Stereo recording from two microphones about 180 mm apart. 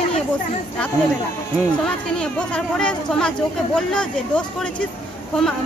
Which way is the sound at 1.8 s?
5° left (ahead or behind).